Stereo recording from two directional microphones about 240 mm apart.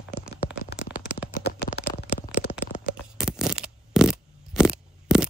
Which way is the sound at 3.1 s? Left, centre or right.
Centre.